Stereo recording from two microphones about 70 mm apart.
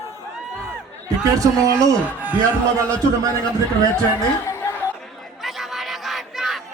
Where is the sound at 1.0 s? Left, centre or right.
Right.